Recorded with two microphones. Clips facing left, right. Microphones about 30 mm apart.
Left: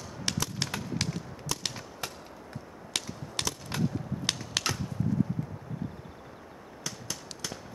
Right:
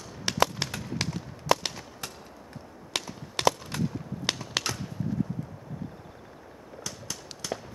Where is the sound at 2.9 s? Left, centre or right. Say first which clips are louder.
Right 2 dB; centre.